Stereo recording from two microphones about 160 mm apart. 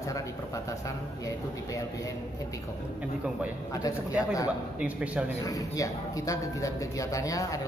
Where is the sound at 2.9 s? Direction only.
10° right (ahead or behind).